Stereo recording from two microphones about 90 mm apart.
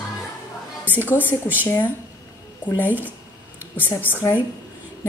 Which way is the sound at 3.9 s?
20° left (ahead or behind).